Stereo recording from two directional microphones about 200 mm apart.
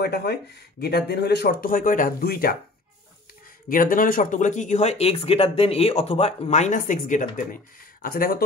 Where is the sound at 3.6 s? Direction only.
45° left (ahead or behind).